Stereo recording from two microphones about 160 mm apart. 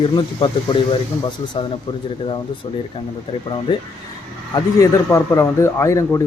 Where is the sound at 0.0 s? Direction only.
30° left (ahead or behind).